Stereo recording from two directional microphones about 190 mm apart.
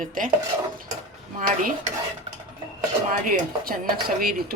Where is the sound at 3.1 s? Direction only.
50° right (ahead or behind).